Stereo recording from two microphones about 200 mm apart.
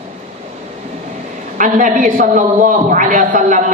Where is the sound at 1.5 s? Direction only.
40° right (ahead or behind).